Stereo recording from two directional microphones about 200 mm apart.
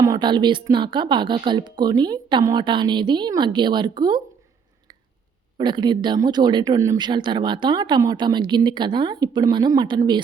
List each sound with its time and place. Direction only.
0.0 s speech: 20° right (ahead or behind)
5.5 s speech: 20° right (ahead or behind)